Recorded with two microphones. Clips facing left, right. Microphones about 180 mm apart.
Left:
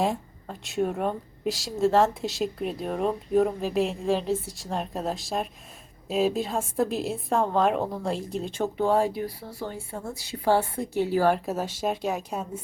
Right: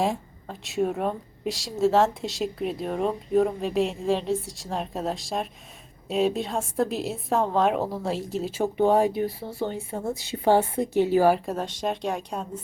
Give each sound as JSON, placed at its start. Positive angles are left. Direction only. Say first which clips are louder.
{"t": 0.0, "sound": "speech", "louder": "even", "side_deg": 0}
{"t": 8.8, "sound": "speech", "louder": "right 3 dB", "side_deg": -20}
{"t": 11.3, "sound": "speech", "louder": "right 2 dB", "side_deg": 0}